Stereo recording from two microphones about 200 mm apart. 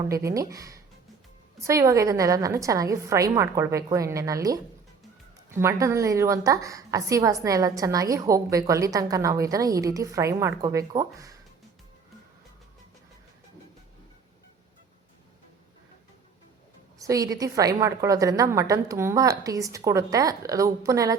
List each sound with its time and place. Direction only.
0.1 s a woman's voice: 15° right (ahead or behind)
17.0 s a woman's voice: 15° right (ahead or behind)